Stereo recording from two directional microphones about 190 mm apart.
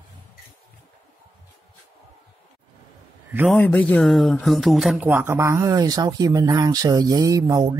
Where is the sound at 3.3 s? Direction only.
10° right (ahead or behind).